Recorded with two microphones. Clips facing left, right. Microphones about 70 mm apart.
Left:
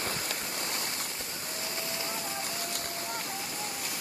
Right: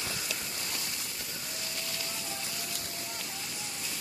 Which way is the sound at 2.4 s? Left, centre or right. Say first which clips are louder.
Left 4 dB; left.